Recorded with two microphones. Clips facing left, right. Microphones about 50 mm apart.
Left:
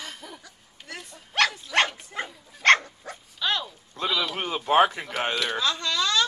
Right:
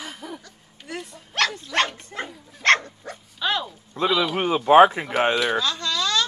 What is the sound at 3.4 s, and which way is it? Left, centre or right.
Speech, centre.